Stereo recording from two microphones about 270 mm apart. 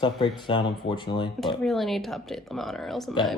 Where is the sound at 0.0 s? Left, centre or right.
Centre.